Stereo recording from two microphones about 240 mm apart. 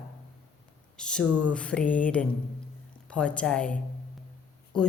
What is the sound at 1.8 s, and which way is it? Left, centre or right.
Mantra, left.